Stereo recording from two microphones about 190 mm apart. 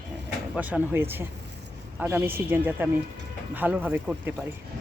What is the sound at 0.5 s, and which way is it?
Speech, 10° right (ahead or behind).